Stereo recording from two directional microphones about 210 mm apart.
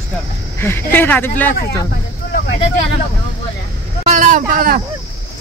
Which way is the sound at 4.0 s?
35° right (ahead or behind).